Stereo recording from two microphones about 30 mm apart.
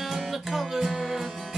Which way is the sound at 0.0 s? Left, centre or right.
Centre.